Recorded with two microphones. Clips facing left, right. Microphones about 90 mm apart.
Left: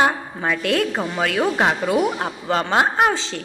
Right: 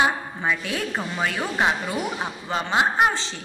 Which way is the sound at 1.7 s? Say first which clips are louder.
Left 6 dB; 75° left (ahead or behind).